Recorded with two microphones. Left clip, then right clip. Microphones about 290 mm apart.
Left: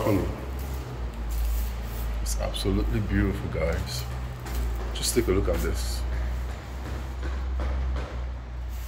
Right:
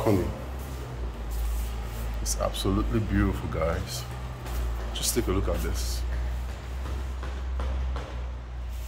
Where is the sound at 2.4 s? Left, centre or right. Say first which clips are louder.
Right 1 dB; centre.